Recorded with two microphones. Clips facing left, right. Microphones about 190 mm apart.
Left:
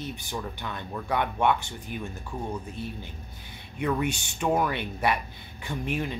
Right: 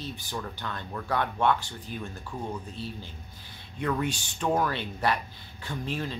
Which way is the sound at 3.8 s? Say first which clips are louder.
Left 2 dB; 10° left (ahead or behind).